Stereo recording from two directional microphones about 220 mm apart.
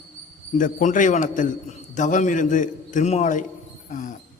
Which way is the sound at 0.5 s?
35° left (ahead or behind).